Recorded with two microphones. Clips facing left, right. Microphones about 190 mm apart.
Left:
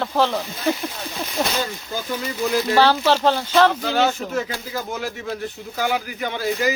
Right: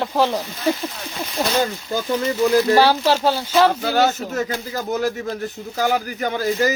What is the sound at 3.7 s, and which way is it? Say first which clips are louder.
Speech: right 2 dB; 40° right (ahead or behind).